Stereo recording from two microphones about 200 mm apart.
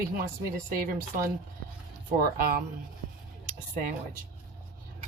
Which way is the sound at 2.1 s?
45° right (ahead or behind).